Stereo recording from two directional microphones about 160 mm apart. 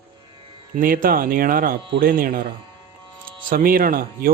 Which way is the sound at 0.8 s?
60° right (ahead or behind).